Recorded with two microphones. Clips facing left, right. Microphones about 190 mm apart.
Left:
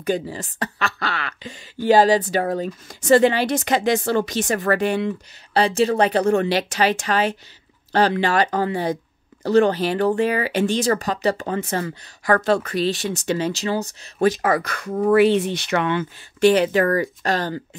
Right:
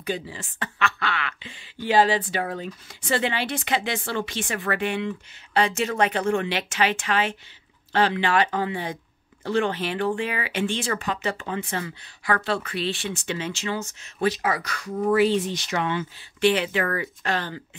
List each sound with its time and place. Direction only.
0.0 s speech: 45° left (ahead or behind); by 16.1 s 60° left (ahead or behind)
16.3 s speech: 40° left (ahead or behind)